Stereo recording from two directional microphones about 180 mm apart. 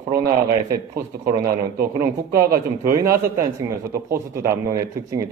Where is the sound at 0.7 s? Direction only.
15° right (ahead or behind).